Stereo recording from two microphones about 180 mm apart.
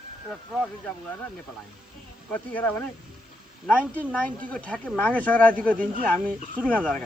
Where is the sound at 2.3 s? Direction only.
10° left (ahead or behind).